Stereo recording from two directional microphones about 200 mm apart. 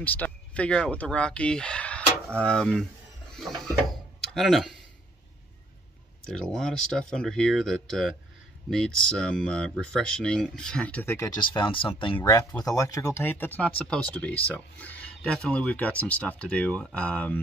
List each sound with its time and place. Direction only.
0.0 s speech: 10° left (ahead or behind)
3.3 s a sound: centre (ahead or behind)
4.3 s speech: centre (ahead or behind)
6.3 s speech: 5° left (ahead or behind)
11.3 s speech: 25° left (ahead or behind); by 17.4 s 5° left (ahead or behind)